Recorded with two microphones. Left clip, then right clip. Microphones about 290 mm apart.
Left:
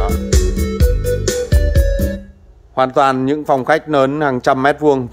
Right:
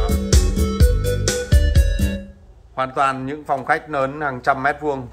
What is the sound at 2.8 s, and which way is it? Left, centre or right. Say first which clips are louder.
A man's voice: left 7 dB; left.